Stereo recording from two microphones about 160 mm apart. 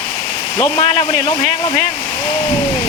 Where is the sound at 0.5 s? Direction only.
25° left (ahead or behind).